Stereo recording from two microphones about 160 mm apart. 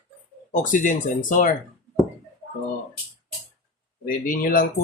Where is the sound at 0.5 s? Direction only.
55° left (ahead or behind).